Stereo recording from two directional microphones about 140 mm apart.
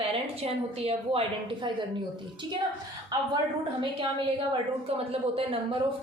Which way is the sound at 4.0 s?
35° right (ahead or behind).